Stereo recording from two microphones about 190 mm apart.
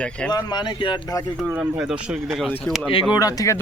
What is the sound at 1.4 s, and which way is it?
Speech, 5° right (ahead or behind).